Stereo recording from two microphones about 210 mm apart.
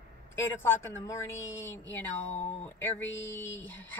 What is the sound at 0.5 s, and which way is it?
A woman's voice, 10° left (ahead or behind).